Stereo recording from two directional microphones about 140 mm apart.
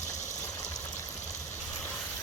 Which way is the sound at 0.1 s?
60° left (ahead or behind).